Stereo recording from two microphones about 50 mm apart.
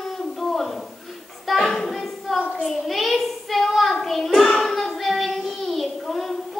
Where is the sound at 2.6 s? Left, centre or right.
Centre.